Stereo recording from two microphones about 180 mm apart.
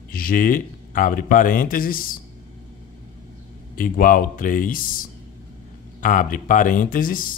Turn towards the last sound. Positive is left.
turn(degrees=50)  # may be behind; listen again after turning